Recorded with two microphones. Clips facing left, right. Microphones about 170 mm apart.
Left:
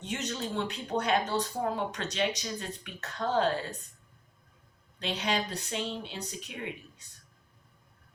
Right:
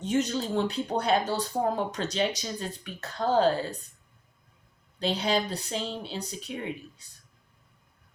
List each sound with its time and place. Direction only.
0.0 s speech: 35° right (ahead or behind)
4.9 s speech: 35° right (ahead or behind)